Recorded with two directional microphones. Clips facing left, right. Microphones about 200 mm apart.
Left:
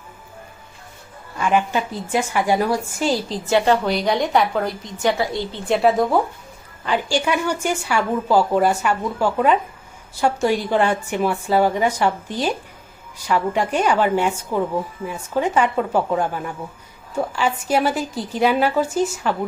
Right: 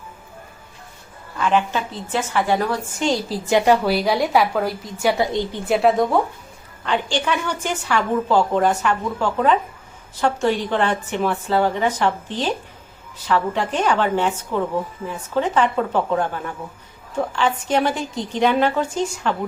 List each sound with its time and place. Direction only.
1.4 s a woman's voice: 10° left (ahead or behind)
3.2 s a woman's voice: 10° right (ahead or behind)
5.1 s a woman's voice: 20° right (ahead or behind)
5.7 s a woman's voice: centre (ahead or behind)